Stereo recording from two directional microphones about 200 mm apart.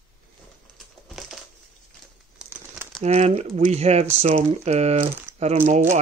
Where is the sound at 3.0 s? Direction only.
30° right (ahead or behind).